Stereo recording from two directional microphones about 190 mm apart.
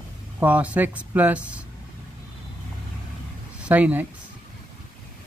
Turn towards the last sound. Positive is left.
turn(degrees=-10)  # may be behind; listen again after turning